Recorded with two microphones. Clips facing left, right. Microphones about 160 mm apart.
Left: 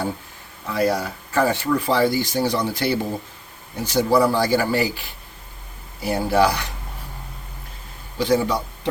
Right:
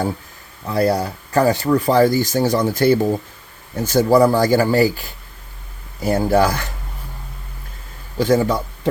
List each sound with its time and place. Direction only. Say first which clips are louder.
0.7 s speech: right 3 dB; 35° right (ahead or behind)
8.2 s a man's voice: right 3 dB; 45° right (ahead or behind)